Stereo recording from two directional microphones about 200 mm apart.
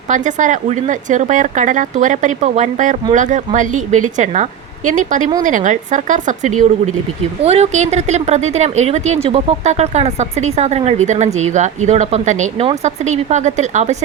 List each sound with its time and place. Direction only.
0.1 s speech: 40° right (ahead or behind)